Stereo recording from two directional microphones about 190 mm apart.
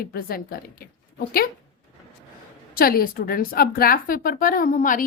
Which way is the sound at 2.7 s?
50° left (ahead or behind).